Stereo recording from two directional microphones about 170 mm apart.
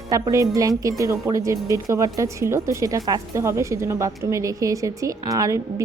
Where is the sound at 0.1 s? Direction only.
20° right (ahead or behind).